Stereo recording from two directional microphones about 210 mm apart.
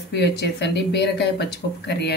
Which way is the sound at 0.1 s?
55° left (ahead or behind).